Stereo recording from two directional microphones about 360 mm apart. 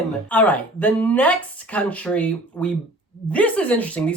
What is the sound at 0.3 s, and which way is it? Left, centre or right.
Speech, centre.